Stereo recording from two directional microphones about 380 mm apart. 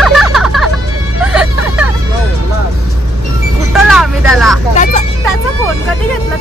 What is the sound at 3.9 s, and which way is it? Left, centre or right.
Vehicle, centre.